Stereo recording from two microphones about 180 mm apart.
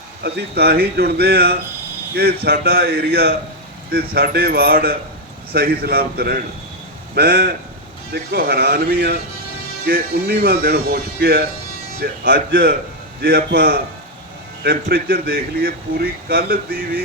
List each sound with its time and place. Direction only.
0.2 s speech: 60° right (ahead or behind)